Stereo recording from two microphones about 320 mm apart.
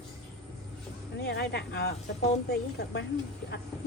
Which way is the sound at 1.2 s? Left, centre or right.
Left.